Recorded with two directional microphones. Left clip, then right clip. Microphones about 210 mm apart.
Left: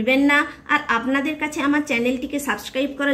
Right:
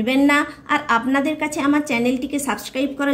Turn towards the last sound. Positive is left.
turn(degrees=-30)  # may be behind; listen again after turning